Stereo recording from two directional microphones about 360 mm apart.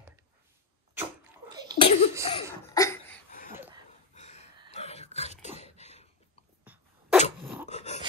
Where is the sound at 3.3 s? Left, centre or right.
Left.